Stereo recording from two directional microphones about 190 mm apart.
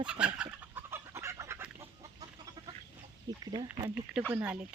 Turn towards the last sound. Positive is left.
turn(degrees=-10)  # may be behind; listen again after turning